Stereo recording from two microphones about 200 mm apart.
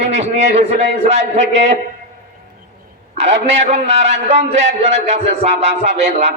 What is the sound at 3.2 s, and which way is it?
Speech, 60° right (ahead or behind).